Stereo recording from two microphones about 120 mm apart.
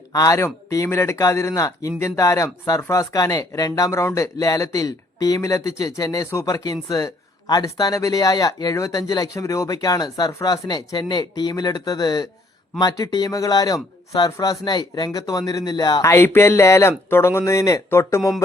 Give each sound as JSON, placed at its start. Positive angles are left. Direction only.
{"t": 0.1, "sound": "speech", "side_deg": 30}
{"t": 16.0, "sound": "speech", "side_deg": 20}